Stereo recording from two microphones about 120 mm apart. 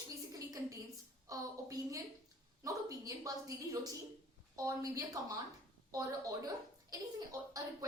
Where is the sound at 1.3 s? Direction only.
25° right (ahead or behind).